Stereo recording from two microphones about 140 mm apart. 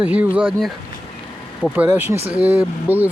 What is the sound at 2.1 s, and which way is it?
Speech, 45° right (ahead or behind).